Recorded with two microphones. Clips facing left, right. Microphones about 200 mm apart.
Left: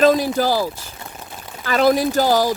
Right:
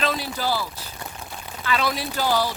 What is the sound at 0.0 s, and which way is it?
Speech, 45° left (ahead or behind).